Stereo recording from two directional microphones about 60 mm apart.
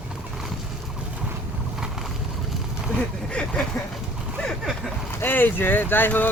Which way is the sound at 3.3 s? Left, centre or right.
Centre.